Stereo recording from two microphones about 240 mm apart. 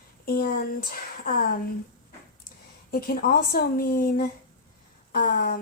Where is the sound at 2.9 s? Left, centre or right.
Left.